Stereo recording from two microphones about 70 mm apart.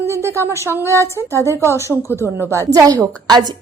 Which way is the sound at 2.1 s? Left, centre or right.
Left.